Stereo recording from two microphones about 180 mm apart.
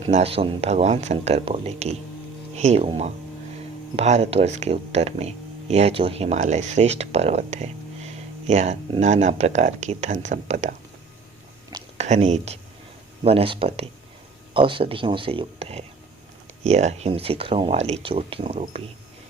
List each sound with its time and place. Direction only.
0.0 s speech: 35° right (ahead or behind)
11.9 s speech: 40° right (ahead or behind)